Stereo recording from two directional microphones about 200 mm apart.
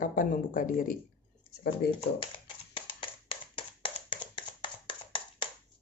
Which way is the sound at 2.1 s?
25° left (ahead or behind).